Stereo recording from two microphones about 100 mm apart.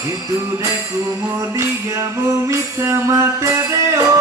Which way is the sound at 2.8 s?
30° right (ahead or behind).